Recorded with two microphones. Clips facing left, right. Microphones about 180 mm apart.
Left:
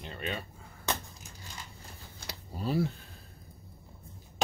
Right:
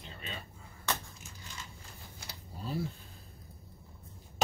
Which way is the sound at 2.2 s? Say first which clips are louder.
Left 8 dB; 75° left (ahead or behind).